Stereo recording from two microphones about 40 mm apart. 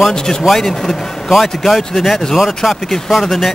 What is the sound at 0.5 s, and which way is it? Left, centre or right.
A man's voice, centre.